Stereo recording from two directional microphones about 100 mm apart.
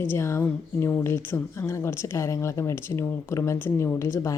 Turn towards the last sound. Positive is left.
turn(degrees=30)  # may be behind; listen again after turning